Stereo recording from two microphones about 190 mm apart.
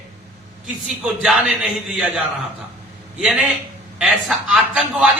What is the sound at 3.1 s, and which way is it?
A man's voice, 5° right (ahead or behind).